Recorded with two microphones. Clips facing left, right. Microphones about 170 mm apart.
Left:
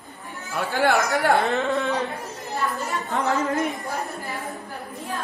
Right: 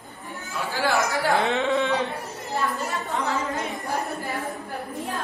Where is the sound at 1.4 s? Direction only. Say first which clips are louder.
Even; centre (ahead or behind).